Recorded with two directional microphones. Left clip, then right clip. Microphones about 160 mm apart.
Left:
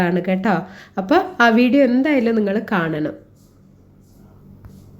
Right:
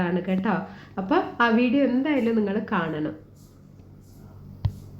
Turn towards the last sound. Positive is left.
turn(degrees=30)  # may be behind; listen again after turning